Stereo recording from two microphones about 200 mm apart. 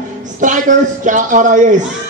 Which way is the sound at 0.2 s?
40° right (ahead or behind).